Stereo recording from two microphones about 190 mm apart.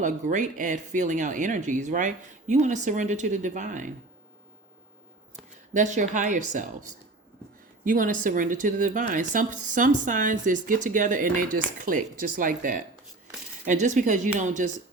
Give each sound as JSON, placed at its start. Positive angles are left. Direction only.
{"t": 0.0, "sound": "speech", "side_deg": -40}
{"t": 5.7, "sound": "speech", "side_deg": -40}